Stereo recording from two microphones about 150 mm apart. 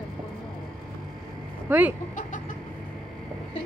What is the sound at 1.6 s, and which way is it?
Speech, 10° right (ahead or behind).